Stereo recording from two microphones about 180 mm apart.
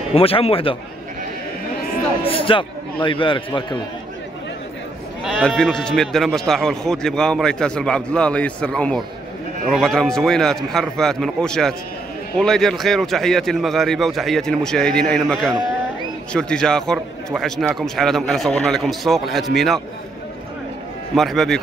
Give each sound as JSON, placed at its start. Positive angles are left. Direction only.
{"t": 0.1, "sound": "a man's voice", "side_deg": 30}
{"t": 2.2, "sound": "a man's voice", "side_deg": 30}
{"t": 5.2, "sound": "speech", "side_deg": 0}
{"t": 21.1, "sound": "speech", "side_deg": 0}